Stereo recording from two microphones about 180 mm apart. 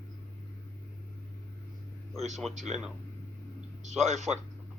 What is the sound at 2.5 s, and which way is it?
Speech, 40° right (ahead or behind).